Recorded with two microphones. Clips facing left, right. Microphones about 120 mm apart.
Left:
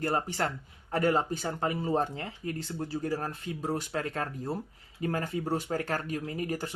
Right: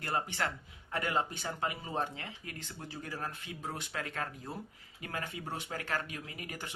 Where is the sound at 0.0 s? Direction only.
40° left (ahead or behind).